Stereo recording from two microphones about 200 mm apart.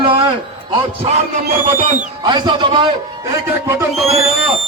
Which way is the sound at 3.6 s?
15° right (ahead or behind).